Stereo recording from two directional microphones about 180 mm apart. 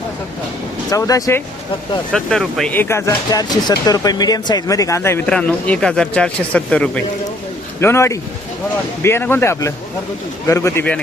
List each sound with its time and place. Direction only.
0.9 s speech: 20° left (ahead or behind)
2.1 s speech: centre (ahead or behind)